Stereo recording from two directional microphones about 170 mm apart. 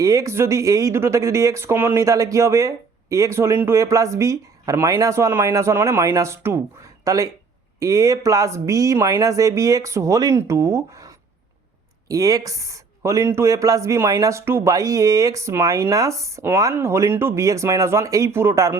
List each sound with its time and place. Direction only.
0.0 s speech: 20° right (ahead or behind)